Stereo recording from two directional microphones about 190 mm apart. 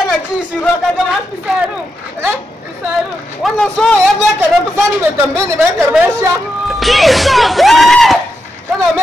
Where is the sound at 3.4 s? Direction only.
Centre (ahead or behind).